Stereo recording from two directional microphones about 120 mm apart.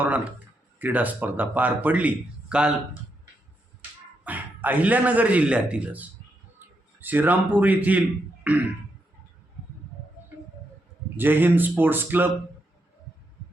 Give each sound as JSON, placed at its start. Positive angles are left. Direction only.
{"t": 0.8, "sound": "a man's voice", "side_deg": -15}
{"t": 3.8, "sound": "a man's voice", "side_deg": -15}
{"t": 11.2, "sound": "a man's voice", "side_deg": -15}